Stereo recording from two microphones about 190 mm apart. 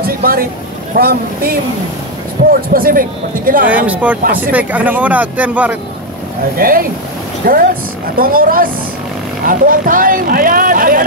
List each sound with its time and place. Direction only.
0.0 s a sound: 50° right (ahead or behind)
0.9 s speech: 50° right (ahead or behind)
2.4 s a sound: 55° right (ahead or behind)
2.7 s speech: 50° right (ahead or behind)
3.6 s speech: 10° right (ahead or behind)
6.5 s speech: 50° right (ahead or behind)